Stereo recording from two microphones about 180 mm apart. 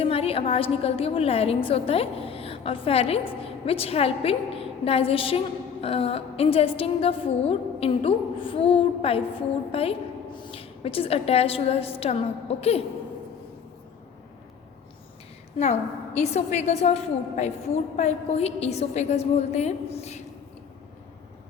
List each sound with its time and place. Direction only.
0.0 s a woman's voice: 35° left (ahead or behind)
15.5 s a woman's voice: 40° left (ahead or behind)